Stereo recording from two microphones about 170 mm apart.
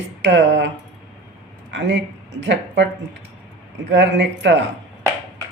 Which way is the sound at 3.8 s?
90° right.